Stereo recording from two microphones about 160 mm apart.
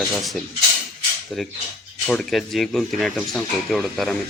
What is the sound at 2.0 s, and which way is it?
Speech, centre (ahead or behind).